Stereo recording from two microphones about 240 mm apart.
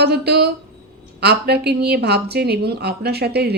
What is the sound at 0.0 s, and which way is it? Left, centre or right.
Speech, right.